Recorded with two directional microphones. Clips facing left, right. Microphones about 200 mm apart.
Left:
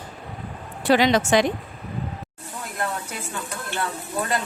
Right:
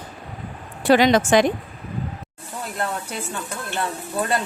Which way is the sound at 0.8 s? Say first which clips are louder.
Right 3 dB; 50° right (ahead or behind).